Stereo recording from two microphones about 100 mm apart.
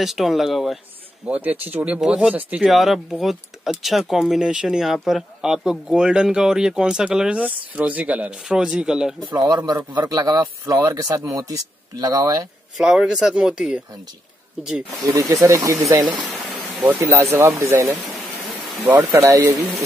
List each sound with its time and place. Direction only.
0.0 s speech: centre (ahead or behind)
1.2 s speech: 15° right (ahead or behind)
9.9 s speech: 40° right (ahead or behind)
10.6 s speech: 30° right (ahead or behind)
12.7 s speech: 5° right (ahead or behind)
15.0 s speech: 35° right (ahead or behind)
16.8 s speech: 25° right (ahead or behind)